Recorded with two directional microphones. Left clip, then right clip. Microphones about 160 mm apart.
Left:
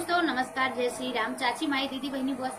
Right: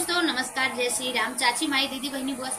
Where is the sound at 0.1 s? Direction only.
15° right (ahead or behind).